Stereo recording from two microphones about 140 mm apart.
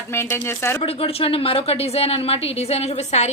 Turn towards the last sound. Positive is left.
turn(degrees=50)  # may be behind; listen again after turning